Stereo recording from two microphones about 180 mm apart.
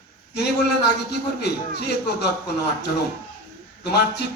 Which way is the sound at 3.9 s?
65° left (ahead or behind).